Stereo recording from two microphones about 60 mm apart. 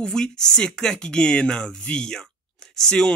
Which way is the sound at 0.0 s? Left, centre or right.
Centre.